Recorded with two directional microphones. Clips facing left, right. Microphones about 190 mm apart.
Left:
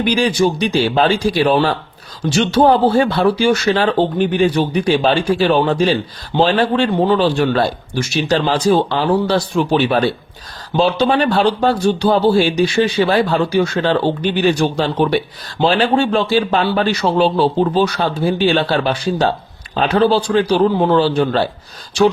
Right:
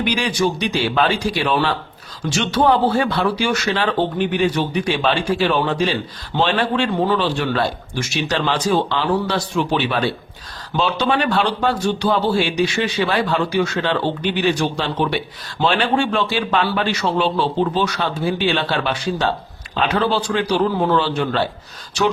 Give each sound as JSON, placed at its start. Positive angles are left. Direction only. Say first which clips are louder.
{"t": 0.0, "sound": "speech", "louder": "left 5 dB", "side_deg": 30}